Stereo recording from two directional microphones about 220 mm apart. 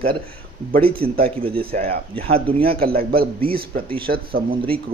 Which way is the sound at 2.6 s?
45° right (ahead or behind).